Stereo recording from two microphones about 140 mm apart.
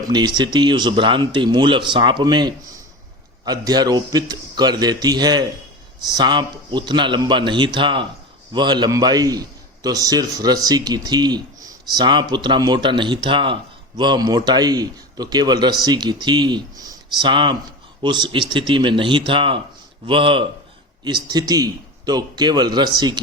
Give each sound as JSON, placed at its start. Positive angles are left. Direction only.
{"t": 0.1, "sound": "a man's voice", "side_deg": -30}